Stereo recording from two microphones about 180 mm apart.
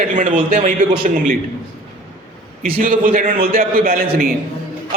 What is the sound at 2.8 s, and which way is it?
A man's voice, 50° right (ahead or behind).